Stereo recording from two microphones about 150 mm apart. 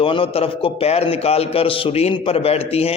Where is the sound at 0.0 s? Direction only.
35° left (ahead or behind).